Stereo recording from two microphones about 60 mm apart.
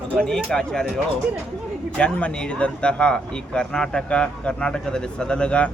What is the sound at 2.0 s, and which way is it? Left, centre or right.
Speech, left.